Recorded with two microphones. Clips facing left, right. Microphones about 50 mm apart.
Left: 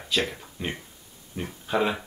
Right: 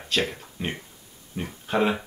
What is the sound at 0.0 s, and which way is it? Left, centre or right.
Speech, centre.